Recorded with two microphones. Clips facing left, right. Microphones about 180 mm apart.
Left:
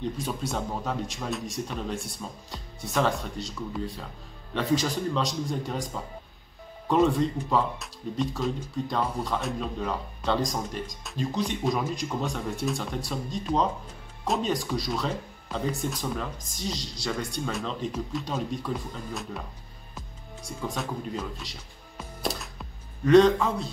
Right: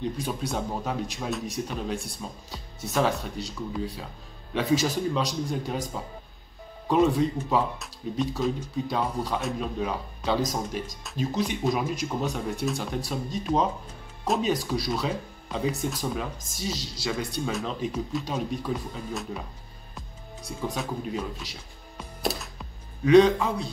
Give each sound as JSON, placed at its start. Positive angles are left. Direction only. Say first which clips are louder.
{"t": 0.2, "sound": "speech", "louder": "right 1 dB", "side_deg": 0}
{"t": 20.7, "sound": "speech", "louder": "right 1 dB", "side_deg": -5}
{"t": 21.9, "sound": "music", "louder": "right 2 dB", "side_deg": 0}